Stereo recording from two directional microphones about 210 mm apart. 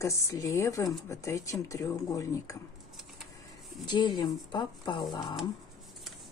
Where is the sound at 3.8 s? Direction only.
20° left (ahead or behind).